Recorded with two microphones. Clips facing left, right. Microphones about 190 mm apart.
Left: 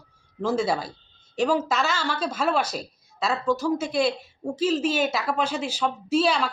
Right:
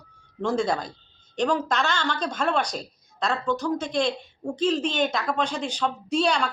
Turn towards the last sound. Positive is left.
turn(degrees=5)  # may be behind; listen again after turning